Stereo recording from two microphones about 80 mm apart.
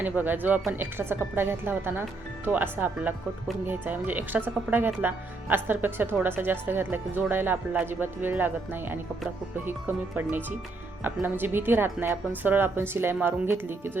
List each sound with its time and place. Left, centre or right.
0.0 s speech: right